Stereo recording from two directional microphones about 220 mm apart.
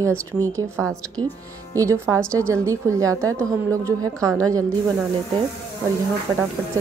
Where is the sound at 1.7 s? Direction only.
10° right (ahead or behind).